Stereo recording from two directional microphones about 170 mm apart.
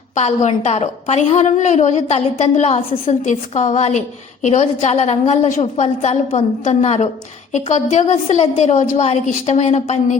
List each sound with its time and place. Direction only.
0.2 s a woman's voice: 40° left (ahead or behind)